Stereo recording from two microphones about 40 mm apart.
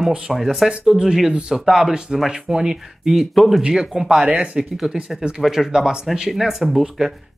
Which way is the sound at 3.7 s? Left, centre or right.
Centre.